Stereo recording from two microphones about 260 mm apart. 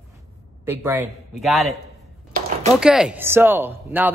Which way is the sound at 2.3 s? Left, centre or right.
Right.